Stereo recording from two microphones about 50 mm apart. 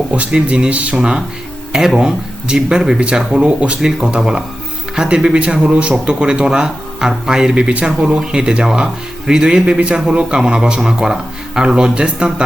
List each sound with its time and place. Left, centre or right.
0.3 s speech: centre
7.5 s speech: right
7.9 s speech: centre